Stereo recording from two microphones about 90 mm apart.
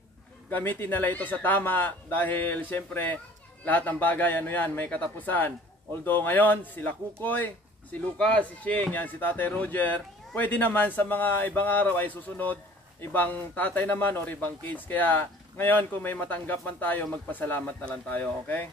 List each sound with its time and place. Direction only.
0.5 s speech: 20° left (ahead or behind)